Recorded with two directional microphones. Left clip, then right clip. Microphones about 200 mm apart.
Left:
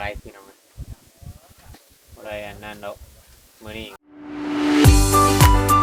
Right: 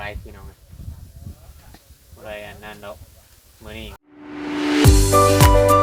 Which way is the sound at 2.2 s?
50° left (ahead or behind).